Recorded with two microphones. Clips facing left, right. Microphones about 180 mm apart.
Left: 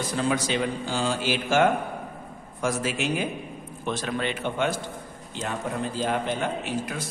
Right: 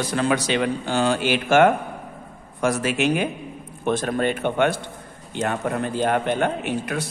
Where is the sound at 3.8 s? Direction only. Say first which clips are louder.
Right 7 dB; 50° right (ahead or behind).